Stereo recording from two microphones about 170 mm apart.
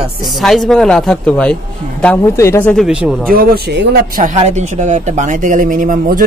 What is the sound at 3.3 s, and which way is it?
A man's voice, 60° right (ahead or behind).